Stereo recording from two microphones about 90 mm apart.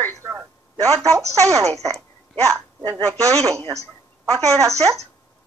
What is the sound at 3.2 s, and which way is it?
Speech, 40° right (ahead or behind).